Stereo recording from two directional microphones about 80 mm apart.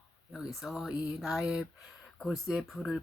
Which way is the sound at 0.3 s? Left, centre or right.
Centre.